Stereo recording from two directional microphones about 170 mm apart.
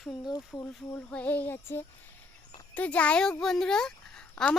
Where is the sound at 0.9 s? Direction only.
10° left (ahead or behind).